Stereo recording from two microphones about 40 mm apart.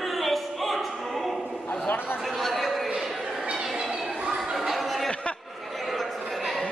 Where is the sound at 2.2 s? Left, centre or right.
Centre.